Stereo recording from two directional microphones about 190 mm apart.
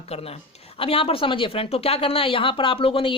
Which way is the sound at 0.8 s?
30° left (ahead or behind).